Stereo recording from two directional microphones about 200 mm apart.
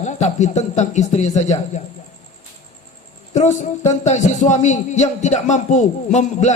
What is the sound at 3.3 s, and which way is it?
A man's voice, 35° left (ahead or behind).